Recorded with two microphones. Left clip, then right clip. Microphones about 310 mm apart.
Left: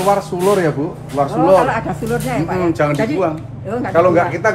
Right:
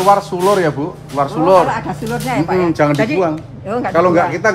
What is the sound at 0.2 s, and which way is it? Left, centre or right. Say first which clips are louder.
Speech: right 1 dB; centre.